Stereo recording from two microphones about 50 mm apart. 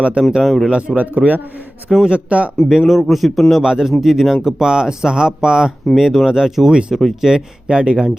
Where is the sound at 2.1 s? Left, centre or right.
Right.